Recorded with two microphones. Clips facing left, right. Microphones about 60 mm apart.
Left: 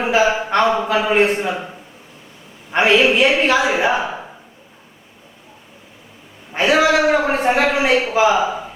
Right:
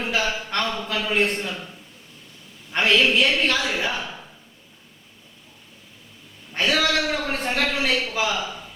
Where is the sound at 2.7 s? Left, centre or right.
Centre.